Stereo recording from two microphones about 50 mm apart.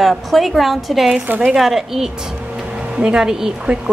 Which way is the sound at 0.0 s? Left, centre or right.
Centre.